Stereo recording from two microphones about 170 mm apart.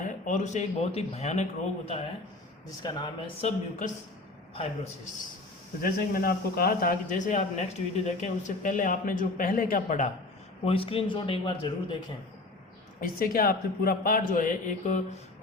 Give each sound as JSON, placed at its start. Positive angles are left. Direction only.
{"t": 0.0, "sound": "speech", "side_deg": 45}
{"t": 2.8, "sound": "speech", "side_deg": 25}
{"t": 3.4, "sound": "a man's voice", "side_deg": 50}
{"t": 5.8, "sound": "a man's voice", "side_deg": 60}
{"t": 10.7, "sound": "speech", "side_deg": 35}
{"t": 13.0, "sound": "a man's voice", "side_deg": 55}